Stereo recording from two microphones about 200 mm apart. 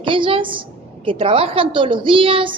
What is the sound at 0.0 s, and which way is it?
A woman's voice, 25° right (ahead or behind).